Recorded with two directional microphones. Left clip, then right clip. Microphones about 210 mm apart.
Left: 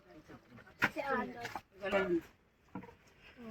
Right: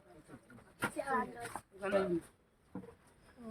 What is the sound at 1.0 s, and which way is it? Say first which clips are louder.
Speech: even; 25° left (ahead or behind).